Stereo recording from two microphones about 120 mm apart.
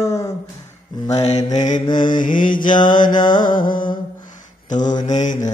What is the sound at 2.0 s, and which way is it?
Mantra, 90° left.